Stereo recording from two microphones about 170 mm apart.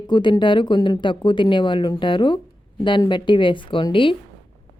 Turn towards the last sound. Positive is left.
turn(degrees=30)  # may be behind; listen again after turning